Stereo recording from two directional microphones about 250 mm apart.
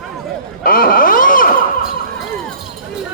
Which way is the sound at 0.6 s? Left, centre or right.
Left.